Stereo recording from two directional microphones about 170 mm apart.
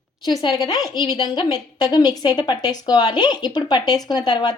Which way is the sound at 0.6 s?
20° left (ahead or behind).